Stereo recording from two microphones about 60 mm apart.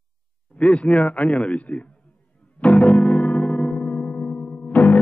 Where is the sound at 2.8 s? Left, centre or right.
Left.